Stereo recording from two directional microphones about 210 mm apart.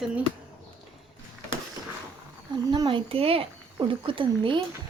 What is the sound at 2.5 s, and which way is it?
Speech, 20° right (ahead or behind).